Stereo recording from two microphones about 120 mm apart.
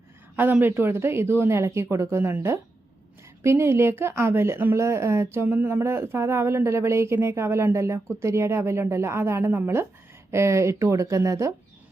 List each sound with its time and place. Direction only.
0.3 s a woman's voice: 15° right (ahead or behind)